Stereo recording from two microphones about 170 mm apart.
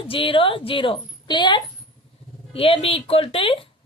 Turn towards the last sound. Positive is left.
turn(degrees=30)  # may be behind; listen again after turning